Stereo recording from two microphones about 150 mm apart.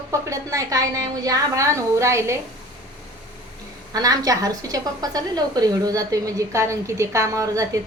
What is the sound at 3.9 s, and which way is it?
A woman's voice, 25° right (ahead or behind).